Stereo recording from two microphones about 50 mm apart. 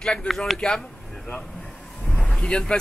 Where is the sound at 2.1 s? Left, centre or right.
Left.